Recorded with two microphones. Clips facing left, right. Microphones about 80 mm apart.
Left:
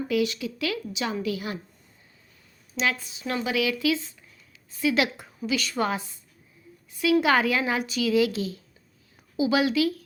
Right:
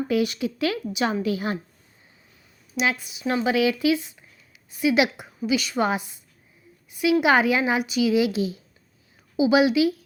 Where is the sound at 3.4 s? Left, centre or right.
Right.